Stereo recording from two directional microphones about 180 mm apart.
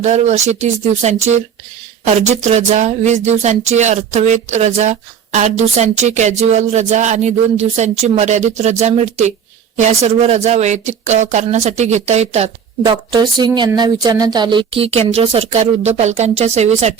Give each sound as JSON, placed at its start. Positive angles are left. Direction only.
{"t": 0.0, "sound": "speech", "side_deg": -40}
{"t": 12.8, "sound": "speech", "side_deg": -25}